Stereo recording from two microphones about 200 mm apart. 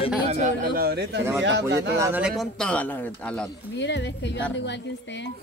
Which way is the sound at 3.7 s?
60° left (ahead or behind).